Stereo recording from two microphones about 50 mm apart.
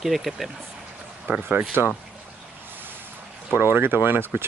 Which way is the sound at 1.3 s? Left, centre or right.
Right.